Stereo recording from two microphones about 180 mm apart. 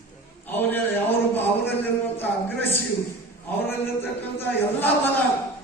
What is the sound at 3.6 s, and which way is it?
Speech, 10° left (ahead or behind).